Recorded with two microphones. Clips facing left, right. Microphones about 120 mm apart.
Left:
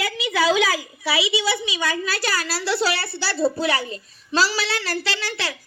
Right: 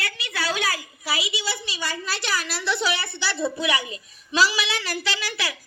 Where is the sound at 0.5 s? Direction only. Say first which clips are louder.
Left 6 dB; 90° left.